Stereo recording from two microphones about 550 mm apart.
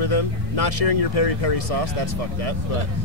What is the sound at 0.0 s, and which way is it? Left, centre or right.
Speech, left.